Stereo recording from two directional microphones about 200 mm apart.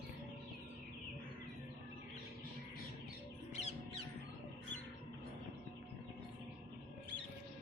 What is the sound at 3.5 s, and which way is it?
Music, 30° left (ahead or behind).